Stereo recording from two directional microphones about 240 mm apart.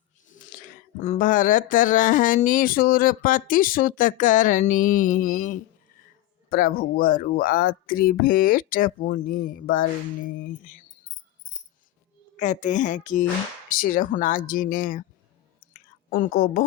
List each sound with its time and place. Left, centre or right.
0.3 s speech: left
12.4 s speech: left
16.0 s speech: left